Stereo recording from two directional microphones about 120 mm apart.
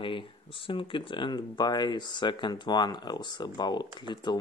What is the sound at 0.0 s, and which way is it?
Speech, 45° left (ahead or behind).